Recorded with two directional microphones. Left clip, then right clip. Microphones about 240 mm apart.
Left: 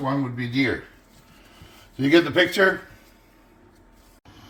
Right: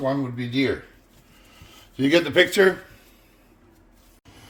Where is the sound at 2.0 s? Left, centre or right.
Right.